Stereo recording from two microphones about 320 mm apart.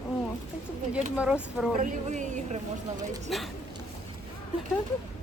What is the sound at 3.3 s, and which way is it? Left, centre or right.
Speech, centre.